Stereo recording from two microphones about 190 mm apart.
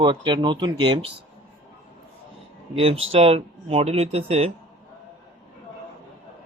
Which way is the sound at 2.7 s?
30° right (ahead or behind).